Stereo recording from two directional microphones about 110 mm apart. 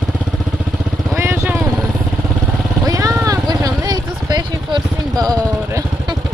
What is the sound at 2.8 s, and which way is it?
Vehicle, 30° right (ahead or behind).